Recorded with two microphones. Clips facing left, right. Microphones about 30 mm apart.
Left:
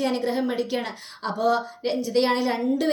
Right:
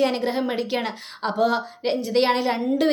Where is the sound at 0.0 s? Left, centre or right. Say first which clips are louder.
Right 2 dB; right.